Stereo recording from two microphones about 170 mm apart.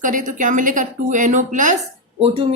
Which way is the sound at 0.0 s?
50° right (ahead or behind).